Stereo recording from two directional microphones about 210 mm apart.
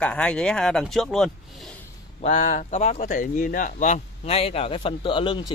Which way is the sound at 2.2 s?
35° left (ahead or behind).